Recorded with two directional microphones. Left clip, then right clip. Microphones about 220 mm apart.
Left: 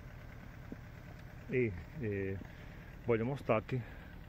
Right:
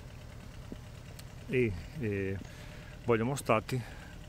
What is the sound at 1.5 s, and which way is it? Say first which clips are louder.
Speech: right 4 dB; 20° right (ahead or behind).